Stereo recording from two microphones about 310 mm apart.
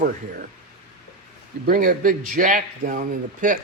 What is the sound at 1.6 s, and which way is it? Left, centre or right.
Speech, right.